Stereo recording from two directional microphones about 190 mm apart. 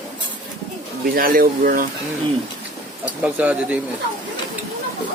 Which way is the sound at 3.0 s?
5° right (ahead or behind).